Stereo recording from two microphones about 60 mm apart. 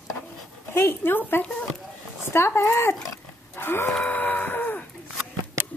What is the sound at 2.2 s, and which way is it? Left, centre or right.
Speech, left.